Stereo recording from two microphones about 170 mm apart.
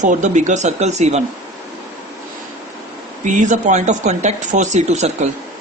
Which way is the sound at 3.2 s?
45° right (ahead or behind).